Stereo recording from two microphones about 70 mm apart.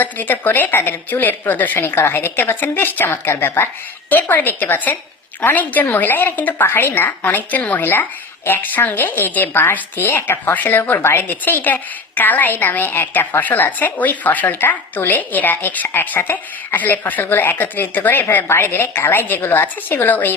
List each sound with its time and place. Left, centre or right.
0.0 s a woman's voice: left